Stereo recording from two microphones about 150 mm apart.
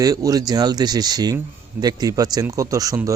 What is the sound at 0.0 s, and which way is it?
Speech, 25° right (ahead or behind).